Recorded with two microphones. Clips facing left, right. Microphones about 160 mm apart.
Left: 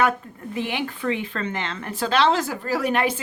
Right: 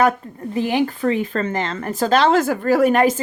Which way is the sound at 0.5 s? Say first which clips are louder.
Right 8 dB; 40° right (ahead or behind).